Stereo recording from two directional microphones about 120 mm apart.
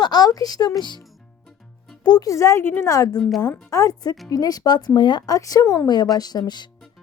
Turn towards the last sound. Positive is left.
turn(degrees=35)  # may be behind; listen again after turning